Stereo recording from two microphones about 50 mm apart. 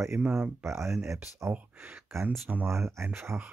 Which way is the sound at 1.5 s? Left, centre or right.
Right.